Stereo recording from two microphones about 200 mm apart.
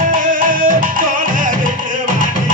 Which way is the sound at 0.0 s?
45° right (ahead or behind).